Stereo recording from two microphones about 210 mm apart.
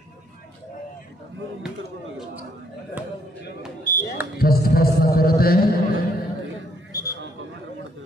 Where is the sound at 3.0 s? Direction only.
10° right (ahead or behind).